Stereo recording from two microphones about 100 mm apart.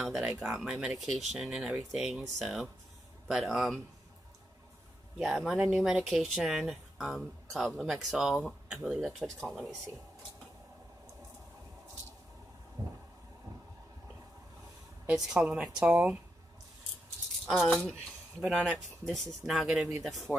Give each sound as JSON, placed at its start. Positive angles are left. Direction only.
{"t": 0.0, "sound": "speech", "side_deg": 0}
{"t": 5.2, "sound": "a woman's voice", "side_deg": -10}
{"t": 12.8, "sound": "a sound", "side_deg": -35}
{"t": 15.0, "sound": "a woman's voice", "side_deg": -5}
{"t": 18.4, "sound": "speech", "side_deg": 0}